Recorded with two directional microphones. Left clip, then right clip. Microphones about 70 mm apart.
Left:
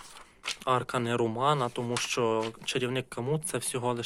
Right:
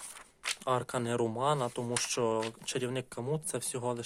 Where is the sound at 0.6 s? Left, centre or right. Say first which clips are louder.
Left 5 dB; right.